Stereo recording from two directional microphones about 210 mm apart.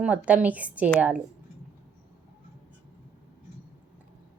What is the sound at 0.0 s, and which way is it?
Speech, 5° right (ahead or behind).